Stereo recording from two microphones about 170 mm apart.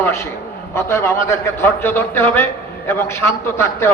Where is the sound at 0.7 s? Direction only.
15° left (ahead or behind).